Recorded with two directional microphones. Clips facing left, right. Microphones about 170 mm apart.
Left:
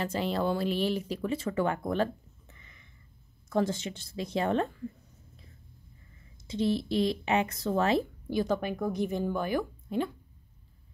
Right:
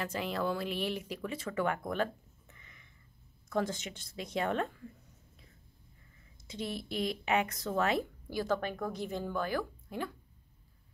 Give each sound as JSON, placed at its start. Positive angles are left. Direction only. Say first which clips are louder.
{"t": 0.0, "sound": "speech", "louder": "left 5 dB", "side_deg": 30}
{"t": 3.4, "sound": "speech", "louder": "left 5 dB", "side_deg": 30}
{"t": 6.4, "sound": "speech", "louder": "left 10 dB", "side_deg": 30}